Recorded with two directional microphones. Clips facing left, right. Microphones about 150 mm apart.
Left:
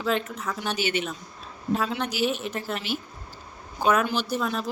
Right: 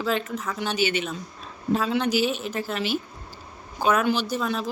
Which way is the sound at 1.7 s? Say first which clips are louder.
Right 4 dB; centre (ahead or behind).